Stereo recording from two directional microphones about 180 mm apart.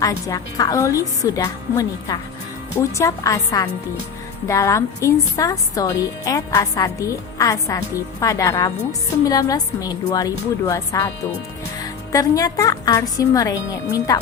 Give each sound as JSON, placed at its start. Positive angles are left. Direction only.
{"t": 0.0, "sound": "a woman's voice", "side_deg": 20}